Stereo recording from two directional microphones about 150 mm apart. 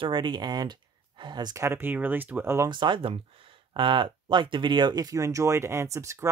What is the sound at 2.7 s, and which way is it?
Speech, 30° right (ahead or behind).